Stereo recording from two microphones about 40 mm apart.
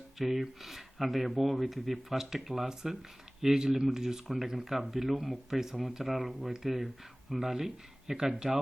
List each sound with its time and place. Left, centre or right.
0.2 s speech: centre